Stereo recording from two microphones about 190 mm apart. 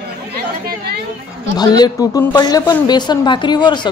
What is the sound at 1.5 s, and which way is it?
A woman's voice, 20° left (ahead or behind).